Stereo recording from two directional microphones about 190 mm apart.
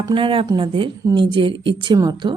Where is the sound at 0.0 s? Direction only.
25° right (ahead or behind).